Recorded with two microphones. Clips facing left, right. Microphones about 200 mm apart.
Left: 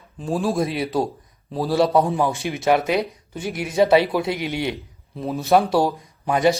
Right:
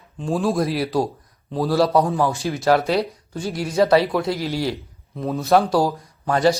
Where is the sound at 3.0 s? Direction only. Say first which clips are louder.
Right 2 dB; centre (ahead or behind).